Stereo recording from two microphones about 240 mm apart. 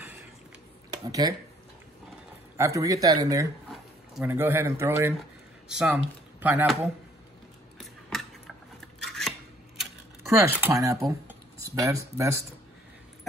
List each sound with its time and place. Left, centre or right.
0.8 s a sound: centre
2.5 s speech: centre
7.8 s scissors: centre
10.4 s speech: centre